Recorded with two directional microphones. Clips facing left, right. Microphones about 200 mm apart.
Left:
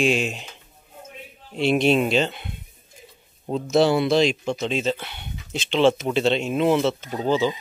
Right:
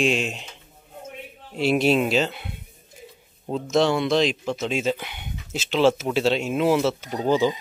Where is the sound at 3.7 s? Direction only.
5° left (ahead or behind).